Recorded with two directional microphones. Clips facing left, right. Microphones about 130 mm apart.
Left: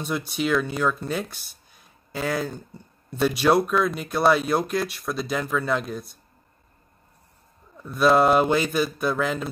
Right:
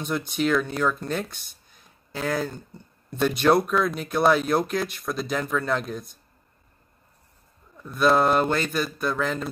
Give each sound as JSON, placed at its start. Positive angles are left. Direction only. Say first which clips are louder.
{"t": 0.0, "sound": "speech", "louder": "right 1 dB", "side_deg": 0}
{"t": 7.8, "sound": "speech", "louder": "left 2 dB", "side_deg": 0}